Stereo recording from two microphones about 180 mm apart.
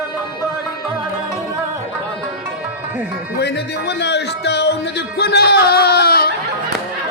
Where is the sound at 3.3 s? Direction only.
70° left (ahead or behind).